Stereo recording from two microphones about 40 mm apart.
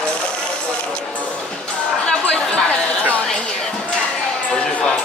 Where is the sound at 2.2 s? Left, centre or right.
Left.